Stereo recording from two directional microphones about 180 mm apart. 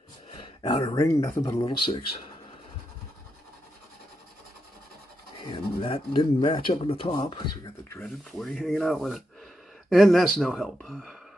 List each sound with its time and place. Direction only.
0.3 s a sound: 30° left (ahead or behind)
0.9 s speech: 20° left (ahead or behind)
5.4 s speech: 25° left (ahead or behind)
7.9 s speech: 10° left (ahead or behind)
8.3 s speech: centre (ahead or behind)